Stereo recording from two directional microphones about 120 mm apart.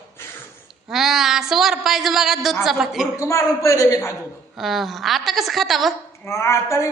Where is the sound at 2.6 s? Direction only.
5° right (ahead or behind).